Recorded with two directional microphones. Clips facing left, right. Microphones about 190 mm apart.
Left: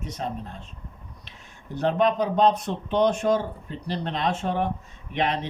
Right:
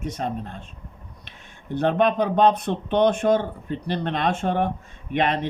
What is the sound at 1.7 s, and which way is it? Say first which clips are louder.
Speech: right 2 dB; 55° right (ahead or behind).